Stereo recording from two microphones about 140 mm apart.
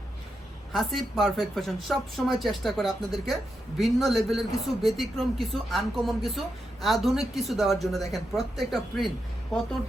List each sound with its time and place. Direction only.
0.7 s speech: centre (ahead or behind)